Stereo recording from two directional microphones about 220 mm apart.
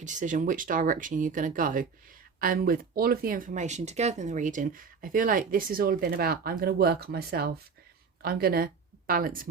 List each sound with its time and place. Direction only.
0.0 s speech: 35° right (ahead or behind)